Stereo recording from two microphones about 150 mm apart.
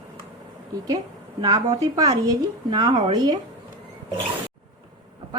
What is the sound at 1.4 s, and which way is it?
A woman's voice, 25° right (ahead or behind).